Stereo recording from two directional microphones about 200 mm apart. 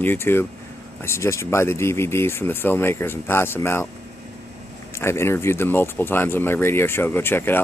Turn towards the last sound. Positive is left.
turn(degrees=10)  # may be behind; listen again after turning